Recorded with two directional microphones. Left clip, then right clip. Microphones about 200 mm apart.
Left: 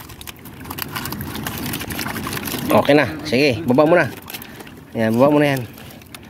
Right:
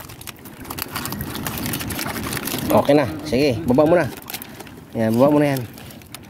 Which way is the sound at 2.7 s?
10° right (ahead or behind).